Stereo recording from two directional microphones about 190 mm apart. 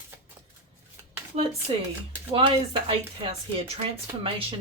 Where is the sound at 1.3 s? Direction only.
35° right (ahead or behind).